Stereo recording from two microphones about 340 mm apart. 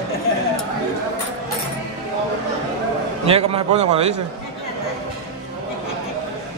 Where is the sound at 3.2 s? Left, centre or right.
Centre.